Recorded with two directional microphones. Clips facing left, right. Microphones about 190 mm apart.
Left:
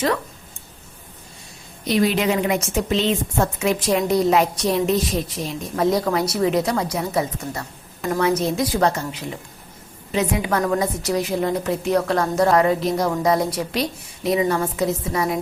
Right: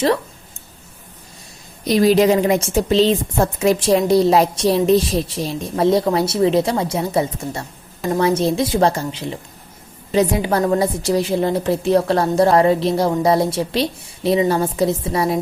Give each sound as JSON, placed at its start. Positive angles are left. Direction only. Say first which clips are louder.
{"t": 1.9, "sound": "a woman's voice", "louder": "right 6 dB", "side_deg": -35}